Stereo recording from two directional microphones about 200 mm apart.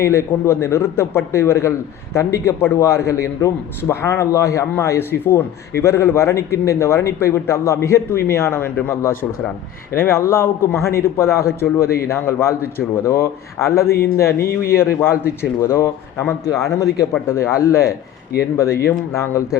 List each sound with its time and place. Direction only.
0.0 s a man's voice: 15° left (ahead or behind)
14.3 s a man's voice: 50° left (ahead or behind)
15.7 s a man's voice: 10° left (ahead or behind)